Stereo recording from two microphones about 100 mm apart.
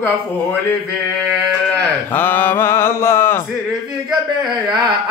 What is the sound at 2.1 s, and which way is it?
Mantra, 20° left (ahead or behind).